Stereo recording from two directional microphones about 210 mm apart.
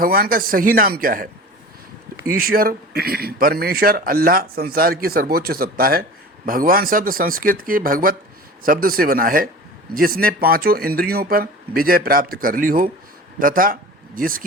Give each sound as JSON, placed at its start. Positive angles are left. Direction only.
{"t": 0.0, "sound": "speech", "side_deg": -45}